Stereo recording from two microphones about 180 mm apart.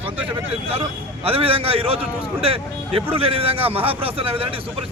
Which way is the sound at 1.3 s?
30° right (ahead or behind).